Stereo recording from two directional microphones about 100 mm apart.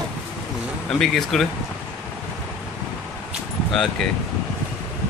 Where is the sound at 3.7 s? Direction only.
5° left (ahead or behind).